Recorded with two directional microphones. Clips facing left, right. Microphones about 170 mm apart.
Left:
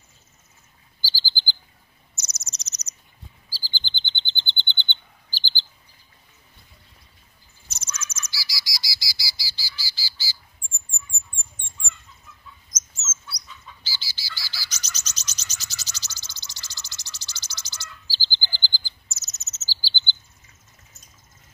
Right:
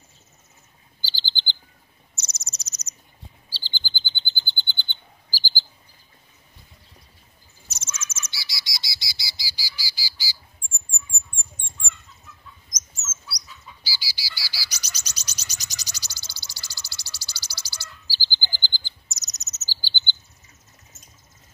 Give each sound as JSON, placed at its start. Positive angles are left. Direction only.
{"t": 1.0, "sound": "chirp", "side_deg": -25}
{"t": 2.1, "sound": "owl", "side_deg": -30}
{"t": 2.5, "sound": "owl", "side_deg": -10}
{"t": 3.4, "sound": "chirp", "side_deg": -25}
{"t": 3.8, "sound": "frog", "side_deg": -5}
{"t": 5.3, "sound": "chirp", "side_deg": -10}
{"t": 8.0, "sound": "bird", "side_deg": -25}
{"t": 9.5, "sound": "squawk", "side_deg": -10}
{"t": 12.6, "sound": "chicken", "side_deg": -10}
{"t": 13.8, "sound": "bird", "side_deg": -10}
{"t": 18.9, "sound": "chirp", "side_deg": -15}